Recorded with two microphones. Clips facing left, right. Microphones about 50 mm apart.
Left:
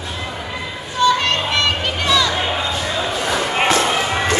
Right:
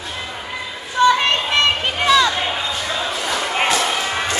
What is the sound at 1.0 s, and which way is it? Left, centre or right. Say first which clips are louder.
Children playing: right 1 dB; right.